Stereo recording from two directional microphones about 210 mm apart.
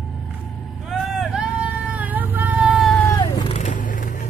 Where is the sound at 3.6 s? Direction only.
40° left (ahead or behind).